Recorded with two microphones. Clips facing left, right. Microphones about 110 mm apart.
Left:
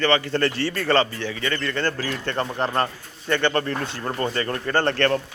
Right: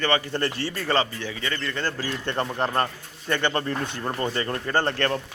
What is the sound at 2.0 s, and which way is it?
A man's voice, 20° right (ahead or behind).